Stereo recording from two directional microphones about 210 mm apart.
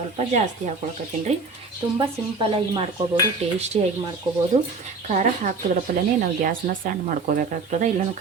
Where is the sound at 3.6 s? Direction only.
30° right (ahead or behind).